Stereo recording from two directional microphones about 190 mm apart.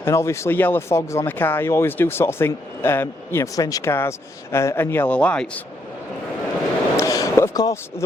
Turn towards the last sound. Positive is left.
turn(degrees=20)  # may be behind; listen again after turning